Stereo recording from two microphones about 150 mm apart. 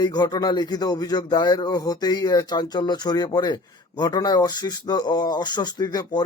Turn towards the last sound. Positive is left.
turn(degrees=25)  # may be behind; listen again after turning